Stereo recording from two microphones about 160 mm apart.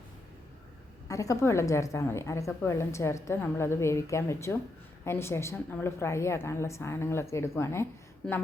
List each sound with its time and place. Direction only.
1.0 s a woman's voice: 20° left (ahead or behind)